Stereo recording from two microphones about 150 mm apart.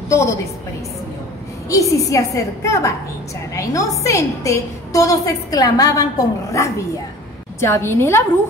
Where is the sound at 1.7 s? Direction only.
20° left (ahead or behind).